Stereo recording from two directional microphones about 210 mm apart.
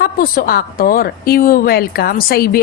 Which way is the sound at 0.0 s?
45° left (ahead or behind).